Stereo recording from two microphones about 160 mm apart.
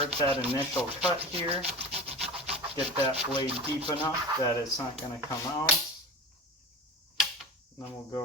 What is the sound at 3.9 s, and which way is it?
Speech, 25° left (ahead or behind).